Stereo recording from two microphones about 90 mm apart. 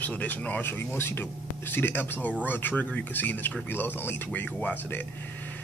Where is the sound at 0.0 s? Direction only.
15° left (ahead or behind).